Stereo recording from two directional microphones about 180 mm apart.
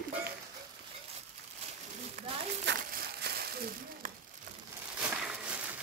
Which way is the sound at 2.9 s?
60° right (ahead or behind).